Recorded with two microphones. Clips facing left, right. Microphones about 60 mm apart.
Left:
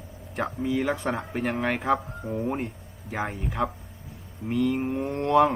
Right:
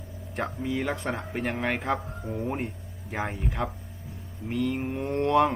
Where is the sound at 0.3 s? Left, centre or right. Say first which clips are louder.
Left 3 dB; centre.